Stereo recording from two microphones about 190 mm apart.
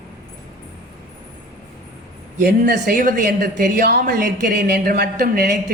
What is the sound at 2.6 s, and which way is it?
Speech, 45° right (ahead or behind).